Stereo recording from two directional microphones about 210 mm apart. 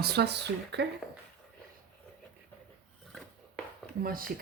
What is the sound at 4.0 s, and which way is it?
Speech, 45° right (ahead or behind).